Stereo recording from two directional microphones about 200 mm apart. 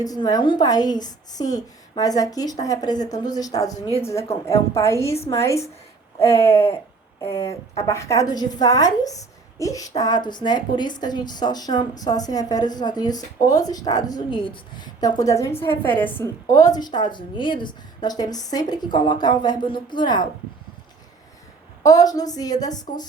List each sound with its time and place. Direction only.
0.0 s a woman's voice: 20° left (ahead or behind)
21.8 s a woman's voice: 20° left (ahead or behind)